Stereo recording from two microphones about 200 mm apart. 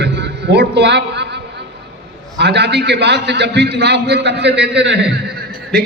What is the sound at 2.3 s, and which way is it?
A man's voice, 60° right (ahead or behind).